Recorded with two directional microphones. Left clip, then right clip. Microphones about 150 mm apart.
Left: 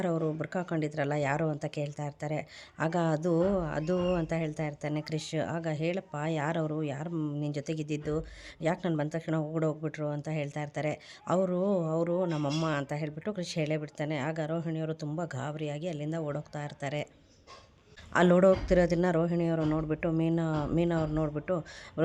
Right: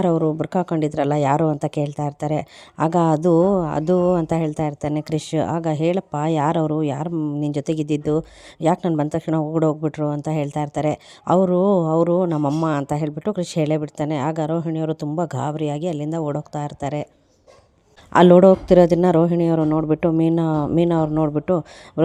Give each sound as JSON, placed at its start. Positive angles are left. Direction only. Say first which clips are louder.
{"t": 0.2, "sound": "speech", "louder": "right 12 dB", "side_deg": -25}
{"t": 0.4, "sound": "speech", "louder": "right 12 dB", "side_deg": -50}
{"t": 9.3, "sound": "speech", "louder": "right 12 dB", "side_deg": -40}
{"t": 9.6, "sound": "speech", "louder": "right 11 dB", "side_deg": -50}
{"t": 12.9, "sound": "speech", "louder": "right 12 dB", "side_deg": -50}
{"t": 18.1, "sound": "speech", "louder": "right 12 dB", "side_deg": -50}